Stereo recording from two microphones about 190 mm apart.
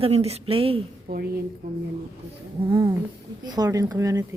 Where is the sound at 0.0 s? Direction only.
35° right (ahead or behind).